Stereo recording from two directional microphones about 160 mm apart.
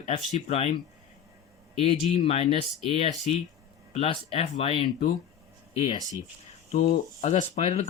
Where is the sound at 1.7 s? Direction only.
40° left (ahead or behind).